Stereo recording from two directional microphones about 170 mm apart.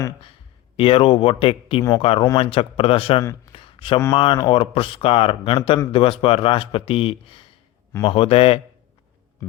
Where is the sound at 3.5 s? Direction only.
30° left (ahead or behind).